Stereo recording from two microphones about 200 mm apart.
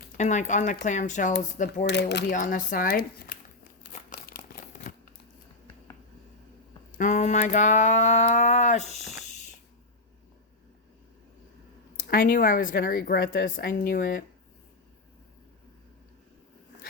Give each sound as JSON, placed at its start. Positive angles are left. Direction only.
{"t": 0.2, "sound": "a sound", "side_deg": 35}
{"t": 1.9, "sound": "speech", "side_deg": 55}
{"t": 2.3, "sound": "a woman's voice", "side_deg": 40}
{"t": 4.1, "sound": "crumpling", "side_deg": 45}
{"t": 7.0, "sound": "a sound", "side_deg": 35}
{"t": 12.0, "sound": "a woman's voice", "side_deg": 45}